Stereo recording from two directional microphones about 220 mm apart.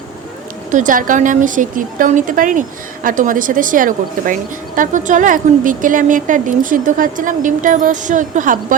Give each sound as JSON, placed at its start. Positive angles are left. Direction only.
{"t": 0.7, "sound": "a woman's voice", "side_deg": -35}